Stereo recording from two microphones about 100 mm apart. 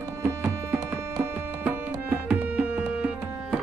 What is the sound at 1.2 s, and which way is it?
Music, 20° right (ahead or behind).